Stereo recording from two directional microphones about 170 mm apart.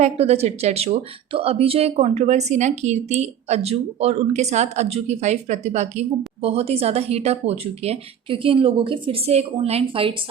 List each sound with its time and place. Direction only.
0.0 s a woman's voice: 40° right (ahead or behind)